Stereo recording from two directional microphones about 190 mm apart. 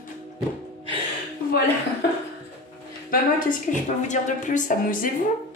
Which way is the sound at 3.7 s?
40° left (ahead or behind).